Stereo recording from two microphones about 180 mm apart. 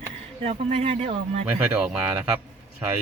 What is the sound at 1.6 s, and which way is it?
Speech, 10° right (ahead or behind).